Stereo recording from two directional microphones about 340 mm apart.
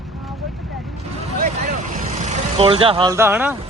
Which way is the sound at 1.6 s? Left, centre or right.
Right.